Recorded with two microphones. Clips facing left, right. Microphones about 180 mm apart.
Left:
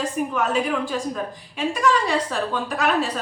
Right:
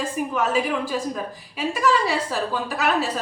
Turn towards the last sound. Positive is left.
turn(degrees=-5)  # may be behind; listen again after turning